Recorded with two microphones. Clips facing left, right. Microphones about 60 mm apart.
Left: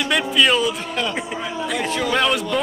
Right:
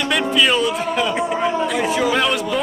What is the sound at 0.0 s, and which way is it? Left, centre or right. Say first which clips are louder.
A man's voice: right 1 dB; centre.